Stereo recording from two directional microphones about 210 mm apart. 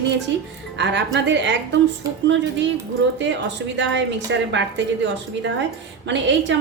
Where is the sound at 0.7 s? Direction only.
55° right (ahead or behind).